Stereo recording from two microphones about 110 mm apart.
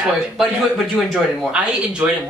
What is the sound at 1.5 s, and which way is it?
Speech, 10° right (ahead or behind).